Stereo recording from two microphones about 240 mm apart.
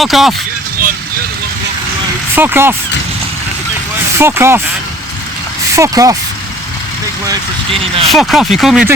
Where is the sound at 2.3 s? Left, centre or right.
Centre.